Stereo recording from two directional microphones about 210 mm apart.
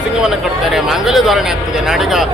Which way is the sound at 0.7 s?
Centre (ahead or behind).